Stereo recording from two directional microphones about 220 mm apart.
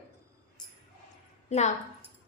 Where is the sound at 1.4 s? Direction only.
30° left (ahead or behind).